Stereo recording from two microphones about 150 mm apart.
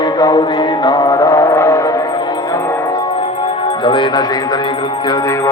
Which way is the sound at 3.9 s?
30° left (ahead or behind).